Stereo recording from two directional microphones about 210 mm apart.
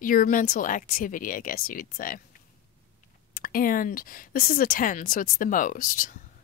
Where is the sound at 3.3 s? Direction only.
45° left (ahead or behind).